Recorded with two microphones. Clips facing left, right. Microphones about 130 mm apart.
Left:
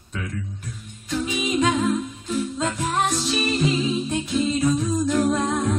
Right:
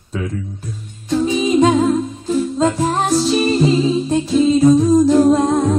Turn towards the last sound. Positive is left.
turn(degrees=-30)  # may be behind; listen again after turning